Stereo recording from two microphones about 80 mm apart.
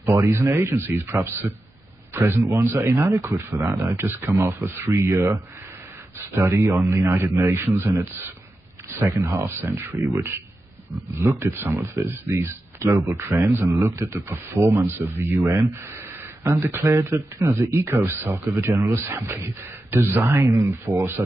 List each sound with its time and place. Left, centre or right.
0.0 s speech: right
9.0 s speech: right
16.5 s speech: right
18.2 s speech: right